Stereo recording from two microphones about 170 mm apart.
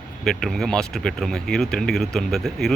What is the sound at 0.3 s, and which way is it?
Speech, centre (ahead or behind).